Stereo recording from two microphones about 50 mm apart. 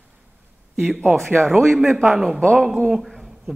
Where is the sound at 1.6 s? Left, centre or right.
Centre.